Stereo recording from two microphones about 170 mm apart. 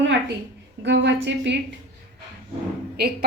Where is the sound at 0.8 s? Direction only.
90° right.